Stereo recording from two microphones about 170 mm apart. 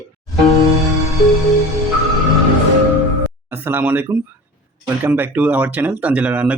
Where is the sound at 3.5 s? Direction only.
10° right (ahead or behind).